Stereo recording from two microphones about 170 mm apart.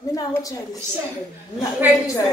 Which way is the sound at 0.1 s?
20° left (ahead or behind).